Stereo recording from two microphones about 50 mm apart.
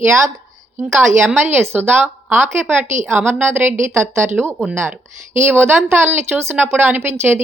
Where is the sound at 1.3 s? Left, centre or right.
Right.